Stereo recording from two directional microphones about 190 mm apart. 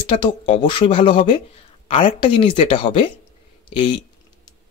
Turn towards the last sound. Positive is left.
turn(degrees=25)  # may be behind; listen again after turning